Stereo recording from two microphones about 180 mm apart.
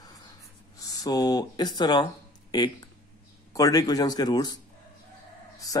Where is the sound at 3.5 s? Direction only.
20° left (ahead or behind).